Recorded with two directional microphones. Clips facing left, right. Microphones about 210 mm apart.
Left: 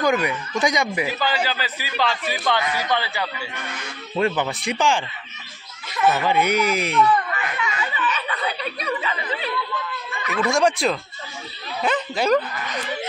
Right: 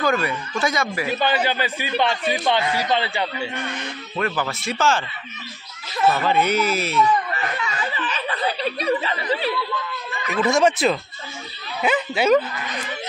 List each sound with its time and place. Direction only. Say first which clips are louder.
0.0 s speech: left 1 dB; 15° left (ahead or behind)
1.1 s speech: right 3 dB; 25° right (ahead or behind)
4.2 s speech: left 3 dB; 20° left (ahead or behind)
6.0 s speech: even; 15° left (ahead or behind)
7.3 s snicker: even; 35° right (ahead or behind)
10.5 s speech: right 2 dB; centre (ahead or behind)